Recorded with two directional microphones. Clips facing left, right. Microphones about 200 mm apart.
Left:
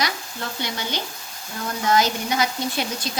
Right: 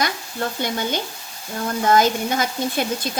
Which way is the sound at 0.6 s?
50° right (ahead or behind).